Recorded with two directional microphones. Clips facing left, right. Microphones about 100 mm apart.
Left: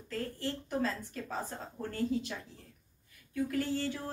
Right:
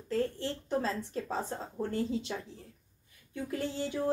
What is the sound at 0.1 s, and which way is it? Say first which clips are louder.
Speech: right 5 dB; 30° right (ahead or behind).